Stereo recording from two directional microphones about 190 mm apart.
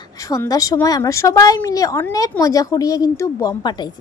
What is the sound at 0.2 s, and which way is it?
Speech, 20° left (ahead or behind).